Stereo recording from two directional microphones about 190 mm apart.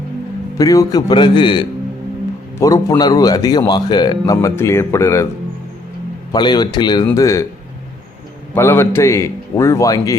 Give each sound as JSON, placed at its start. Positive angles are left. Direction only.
{"t": 0.6, "sound": "a man's voice", "side_deg": 20}
{"t": 6.3, "sound": "speech", "side_deg": 20}
{"t": 8.5, "sound": "a man's voice", "side_deg": 15}